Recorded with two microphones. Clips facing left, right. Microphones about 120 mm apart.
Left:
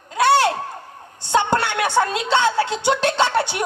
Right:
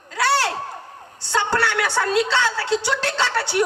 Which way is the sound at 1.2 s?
20° left (ahead or behind).